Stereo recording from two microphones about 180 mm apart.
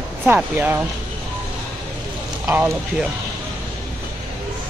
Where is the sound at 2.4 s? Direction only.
10° right (ahead or behind).